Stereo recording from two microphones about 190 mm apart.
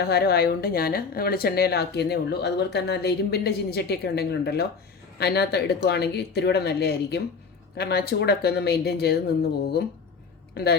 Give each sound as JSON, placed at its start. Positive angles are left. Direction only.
{"t": 0.0, "sound": "speech", "side_deg": 55}
{"t": 10.5, "sound": "speech", "side_deg": 60}